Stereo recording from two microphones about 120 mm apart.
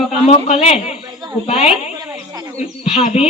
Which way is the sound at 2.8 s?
55° left (ahead or behind).